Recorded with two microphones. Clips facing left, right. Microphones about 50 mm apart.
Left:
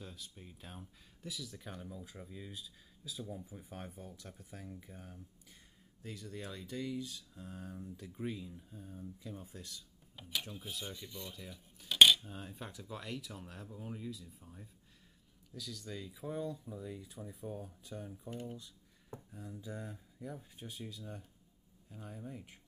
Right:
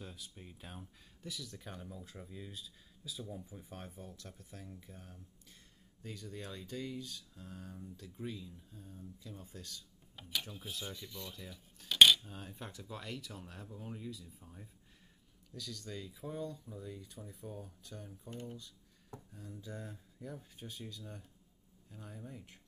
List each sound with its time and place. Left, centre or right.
0.0 s speech: centre
4.4 s speech: left
6.4 s speech: centre
10.1 s speech: centre
17.5 s speech: left